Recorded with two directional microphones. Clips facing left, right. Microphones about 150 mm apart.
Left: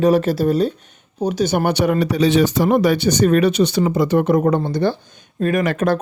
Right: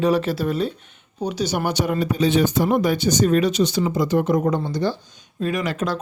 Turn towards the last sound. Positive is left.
turn(degrees=55)  # may be behind; listen again after turning